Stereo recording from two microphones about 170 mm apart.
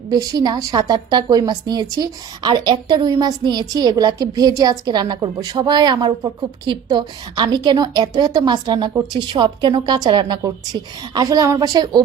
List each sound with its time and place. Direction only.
0.1 s a woman's voice: 25° right (ahead or behind)